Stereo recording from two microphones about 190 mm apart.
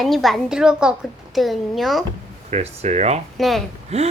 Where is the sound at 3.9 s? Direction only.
35° right (ahead or behind).